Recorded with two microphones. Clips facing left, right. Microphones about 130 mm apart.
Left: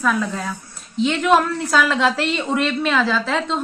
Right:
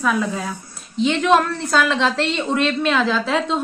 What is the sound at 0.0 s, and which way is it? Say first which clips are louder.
A woman's voice: even; 5° right (ahead or behind).